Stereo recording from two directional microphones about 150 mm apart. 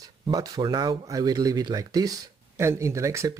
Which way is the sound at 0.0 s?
25° right (ahead or behind).